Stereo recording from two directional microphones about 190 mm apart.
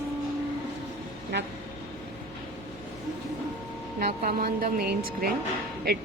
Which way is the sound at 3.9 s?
50° right (ahead or behind).